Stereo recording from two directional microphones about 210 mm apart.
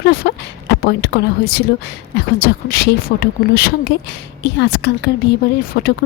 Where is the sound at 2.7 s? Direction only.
50° left (ahead or behind).